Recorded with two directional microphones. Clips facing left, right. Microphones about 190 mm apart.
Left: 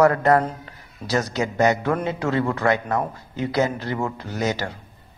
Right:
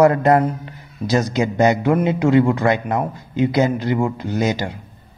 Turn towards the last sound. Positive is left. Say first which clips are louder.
# right 5 dB
turn(degrees=-15)  # may be behind; listen again after turning